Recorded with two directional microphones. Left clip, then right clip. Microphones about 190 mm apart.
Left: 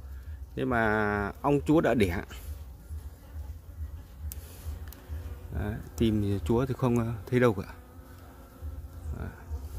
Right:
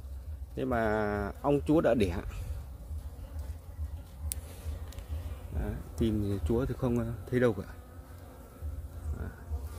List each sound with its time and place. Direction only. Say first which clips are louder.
0.6 s speech: left 3 dB; 35° left (ahead or behind)
5.6 s speech: left 4 dB; 40° left (ahead or behind)